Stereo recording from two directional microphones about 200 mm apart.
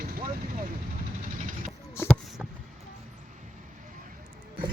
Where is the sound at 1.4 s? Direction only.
40° right (ahead or behind).